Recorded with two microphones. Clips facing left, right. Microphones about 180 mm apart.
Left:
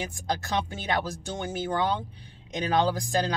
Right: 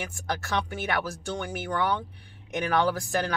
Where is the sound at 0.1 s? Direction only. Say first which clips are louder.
Left 1 dB; 15° left (ahead or behind).